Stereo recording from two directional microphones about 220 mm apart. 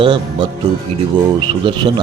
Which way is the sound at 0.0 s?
20° right (ahead or behind).